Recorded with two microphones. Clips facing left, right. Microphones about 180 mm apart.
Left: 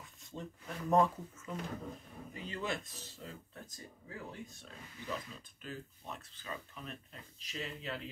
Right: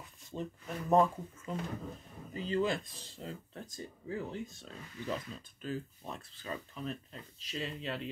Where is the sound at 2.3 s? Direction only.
30° right (ahead or behind).